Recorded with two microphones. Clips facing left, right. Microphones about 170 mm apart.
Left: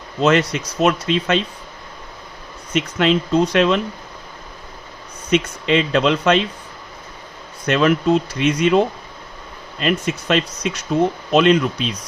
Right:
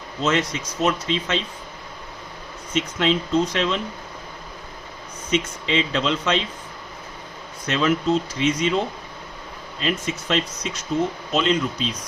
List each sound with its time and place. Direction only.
0.2 s speech: 65° left (ahead or behind)
2.7 s speech: 65° left (ahead or behind)
5.3 s speech: 60° left (ahead or behind)
7.7 s speech: 65° left (ahead or behind)
9.8 s speech: 65° left (ahead or behind)